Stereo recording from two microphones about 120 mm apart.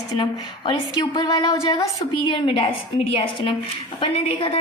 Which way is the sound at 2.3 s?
45° left (ahead or behind).